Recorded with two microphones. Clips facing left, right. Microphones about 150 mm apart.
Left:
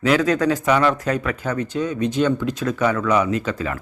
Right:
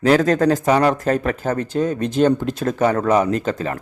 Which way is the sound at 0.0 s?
40° right (ahead or behind).